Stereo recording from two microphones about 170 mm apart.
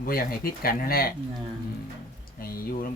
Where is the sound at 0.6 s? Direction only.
60° left (ahead or behind).